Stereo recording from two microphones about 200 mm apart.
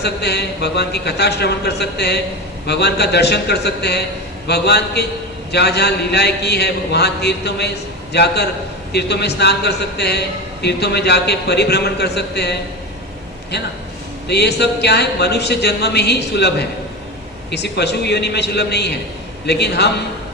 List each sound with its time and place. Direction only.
0.0 s a man's voice: 55° left (ahead or behind)
14.3 s a man's voice: 55° left (ahead or behind)